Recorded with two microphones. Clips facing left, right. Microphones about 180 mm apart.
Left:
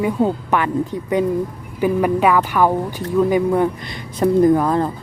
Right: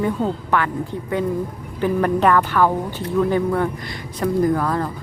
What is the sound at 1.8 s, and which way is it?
Speech, 10° left (ahead or behind).